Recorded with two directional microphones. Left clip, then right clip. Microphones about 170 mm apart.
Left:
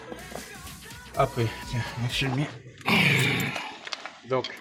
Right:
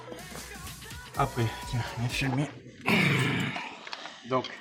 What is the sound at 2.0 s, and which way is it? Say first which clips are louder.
Speech: left 4 dB; centre (ahead or behind).